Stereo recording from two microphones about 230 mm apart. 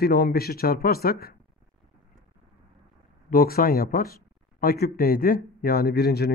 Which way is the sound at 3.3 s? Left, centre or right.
Left.